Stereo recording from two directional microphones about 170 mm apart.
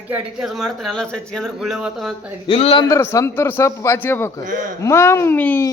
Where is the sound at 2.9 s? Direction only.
15° left (ahead or behind).